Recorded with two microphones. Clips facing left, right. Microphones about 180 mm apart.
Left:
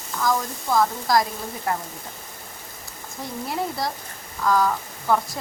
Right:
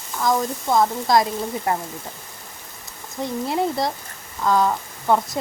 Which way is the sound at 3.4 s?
25° right (ahead or behind).